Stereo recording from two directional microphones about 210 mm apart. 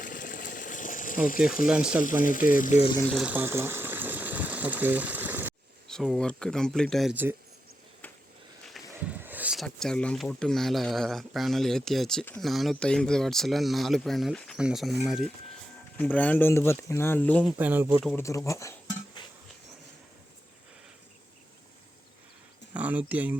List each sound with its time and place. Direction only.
0.0 s water: 40° left (ahead or behind)
1.6 s speech: 5° right (ahead or behind)
2.2 s speech: 40° left (ahead or behind)
3.1 s water: 5° right (ahead or behind)
5.9 s speech: centre (ahead or behind)
9.0 s speech: 5° right (ahead or behind)
17.6 s speech: 10° right (ahead or behind)
18.2 s a sound: 15° left (ahead or behind)
22.7 s speech: 5° right (ahead or behind)